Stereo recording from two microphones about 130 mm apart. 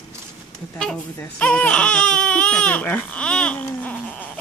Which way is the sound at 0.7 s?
10° left (ahead or behind).